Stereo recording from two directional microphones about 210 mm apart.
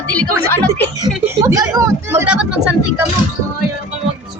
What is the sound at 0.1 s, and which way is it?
A woman's voice, 5° left (ahead or behind).